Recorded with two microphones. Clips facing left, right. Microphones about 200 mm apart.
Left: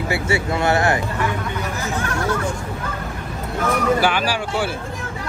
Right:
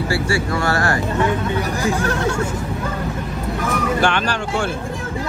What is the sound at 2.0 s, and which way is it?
Speech, 30° right (ahead or behind).